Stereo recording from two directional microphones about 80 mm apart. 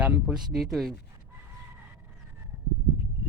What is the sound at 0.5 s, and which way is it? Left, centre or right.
Speech, centre.